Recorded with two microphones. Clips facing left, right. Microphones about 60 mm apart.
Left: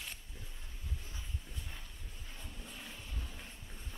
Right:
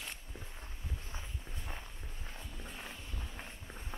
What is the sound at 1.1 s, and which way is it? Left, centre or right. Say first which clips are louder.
Walk: right 2 dB; right.